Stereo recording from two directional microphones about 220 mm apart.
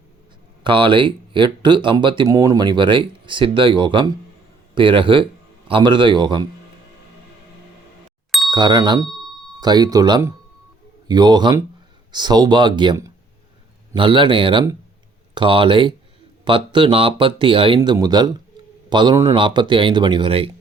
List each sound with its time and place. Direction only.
0.6 s a man's voice: 20° right (ahead or behind)
8.4 s speech: 20° right (ahead or behind)